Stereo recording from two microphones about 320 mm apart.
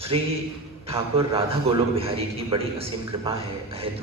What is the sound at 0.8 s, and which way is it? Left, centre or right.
A man's voice, centre.